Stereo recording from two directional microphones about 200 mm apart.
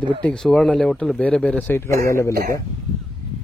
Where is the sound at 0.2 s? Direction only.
5° left (ahead or behind).